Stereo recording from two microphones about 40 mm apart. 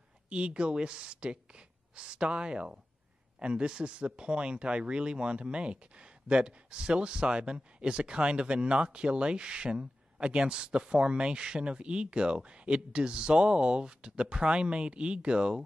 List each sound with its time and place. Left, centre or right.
0.3 s a man's voice: right